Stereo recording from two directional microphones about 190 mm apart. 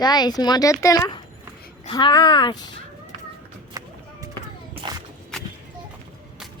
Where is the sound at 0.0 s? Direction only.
20° left (ahead or behind).